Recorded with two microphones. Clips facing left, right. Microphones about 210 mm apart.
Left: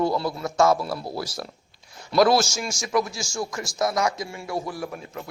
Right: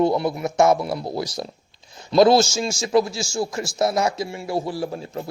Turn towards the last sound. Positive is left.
turn(degrees=-30)  # may be behind; listen again after turning